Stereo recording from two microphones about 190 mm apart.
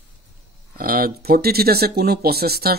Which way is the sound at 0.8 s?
50° right (ahead or behind).